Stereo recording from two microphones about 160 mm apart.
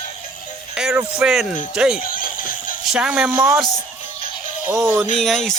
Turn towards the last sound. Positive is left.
turn(degrees=0)  # may be behind; listen again after turning